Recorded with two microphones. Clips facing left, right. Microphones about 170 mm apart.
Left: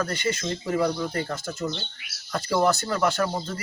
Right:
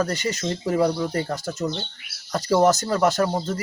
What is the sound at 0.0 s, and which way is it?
Speech, 40° right (ahead or behind).